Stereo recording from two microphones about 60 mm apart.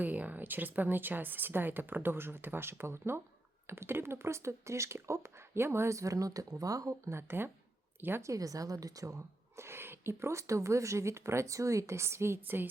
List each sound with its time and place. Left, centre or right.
0.0 s speech: right
7.1 s speech: right
8.2 s a woman's voice: right
9.1 s speech: right